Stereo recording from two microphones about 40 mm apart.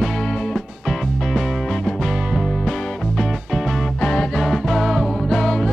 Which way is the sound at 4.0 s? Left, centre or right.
Left.